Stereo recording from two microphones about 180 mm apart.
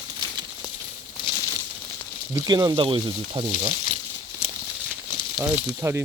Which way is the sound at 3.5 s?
45° left (ahead or behind).